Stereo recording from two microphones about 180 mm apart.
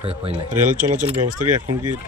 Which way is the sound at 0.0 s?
30° right (ahead or behind).